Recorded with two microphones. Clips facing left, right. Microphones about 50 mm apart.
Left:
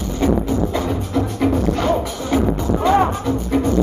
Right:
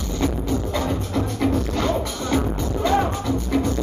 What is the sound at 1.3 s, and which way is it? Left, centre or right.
Music, centre.